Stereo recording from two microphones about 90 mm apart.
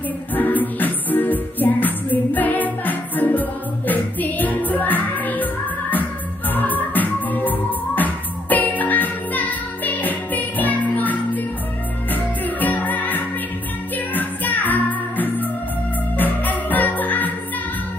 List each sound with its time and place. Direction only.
0.3 s music: 20° left (ahead or behind)